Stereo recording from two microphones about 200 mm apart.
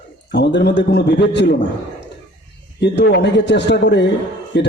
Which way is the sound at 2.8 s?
60° left (ahead or behind).